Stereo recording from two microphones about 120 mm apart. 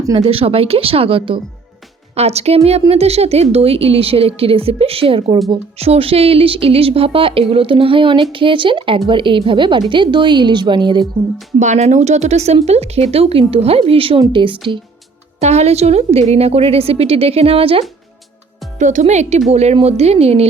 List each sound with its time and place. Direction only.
0.1 s a woman's voice: 55° right (ahead or behind)
2.1 s a woman's voice: 60° right (ahead or behind); by 11.0 s 40° right (ahead or behind)
11.6 s a woman's voice: 75° right (ahead or behind); by 14.6 s 45° right (ahead or behind)
15.4 s a woman's voice: 65° right (ahead or behind)
18.8 s a woman's voice: 90° right; by 20.5 s 55° right (ahead or behind)